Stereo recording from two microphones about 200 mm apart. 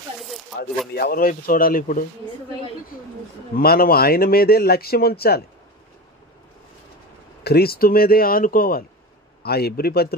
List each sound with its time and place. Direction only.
0.9 s speech: 50° left (ahead or behind)
3.5 s speech: 50° left (ahead or behind)
7.4 s speech: 50° left (ahead or behind)